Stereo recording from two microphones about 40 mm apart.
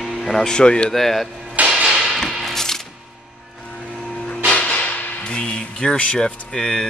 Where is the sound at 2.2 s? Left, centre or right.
Centre.